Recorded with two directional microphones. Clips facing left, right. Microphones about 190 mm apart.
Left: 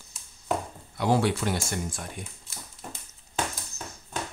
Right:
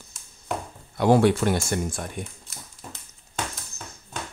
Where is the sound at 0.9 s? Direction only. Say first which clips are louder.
Right 6 dB; 55° right (ahead or behind).